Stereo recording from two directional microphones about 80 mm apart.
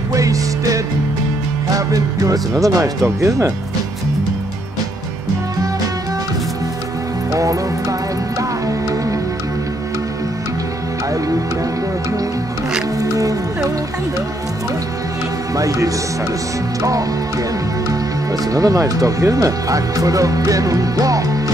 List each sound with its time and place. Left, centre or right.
0.1 s speech: right
13.0 s music: right
15.5 s speech: right